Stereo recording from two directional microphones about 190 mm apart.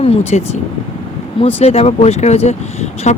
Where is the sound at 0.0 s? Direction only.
30° left (ahead or behind).